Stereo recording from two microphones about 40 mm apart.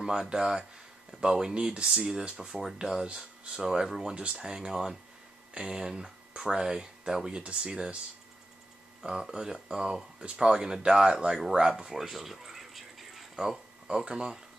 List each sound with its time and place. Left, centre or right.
0.0 s speech: centre
3.6 s speech: centre
4.1 s speech: right
4.4 s speech: centre
9.0 s speech: centre
13.4 s a sound: centre
14.0 s speech: centre